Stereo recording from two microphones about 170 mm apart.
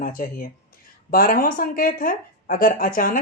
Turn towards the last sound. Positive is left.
turn(degrees=55)  # may be behind; listen again after turning